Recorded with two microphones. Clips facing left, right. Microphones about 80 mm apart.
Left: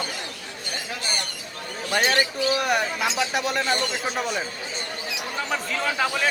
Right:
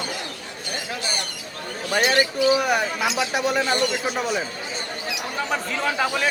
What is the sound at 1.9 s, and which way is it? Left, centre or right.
Speech, centre.